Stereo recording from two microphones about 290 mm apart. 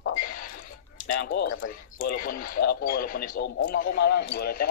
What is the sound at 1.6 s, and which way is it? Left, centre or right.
Speech, left.